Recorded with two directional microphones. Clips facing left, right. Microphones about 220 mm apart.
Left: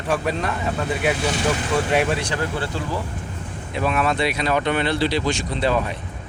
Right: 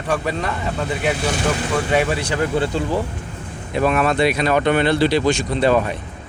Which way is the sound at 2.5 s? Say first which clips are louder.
Right 6 dB; 20° right (ahead or behind).